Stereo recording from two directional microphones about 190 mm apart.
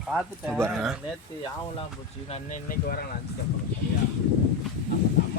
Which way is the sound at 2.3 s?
45° left (ahead or behind).